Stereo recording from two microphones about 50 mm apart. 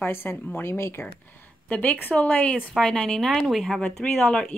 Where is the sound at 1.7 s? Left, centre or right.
Left; by 3.2 s centre.